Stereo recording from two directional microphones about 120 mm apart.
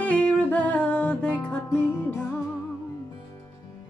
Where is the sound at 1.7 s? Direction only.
25° left (ahead or behind).